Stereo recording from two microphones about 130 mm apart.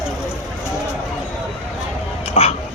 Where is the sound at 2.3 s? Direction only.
55° left (ahead or behind).